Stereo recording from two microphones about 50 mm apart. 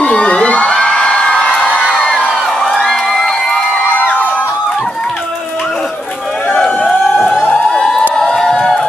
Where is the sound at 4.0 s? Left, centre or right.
Left.